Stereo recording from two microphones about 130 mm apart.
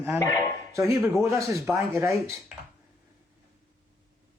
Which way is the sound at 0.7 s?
25° right (ahead or behind).